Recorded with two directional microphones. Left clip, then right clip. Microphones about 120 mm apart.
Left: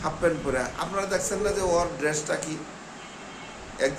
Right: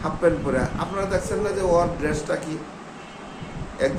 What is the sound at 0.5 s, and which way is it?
Speech, 15° left (ahead or behind).